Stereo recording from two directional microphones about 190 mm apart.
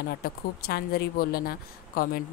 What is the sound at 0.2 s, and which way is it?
A woman's voice, 55° left (ahead or behind).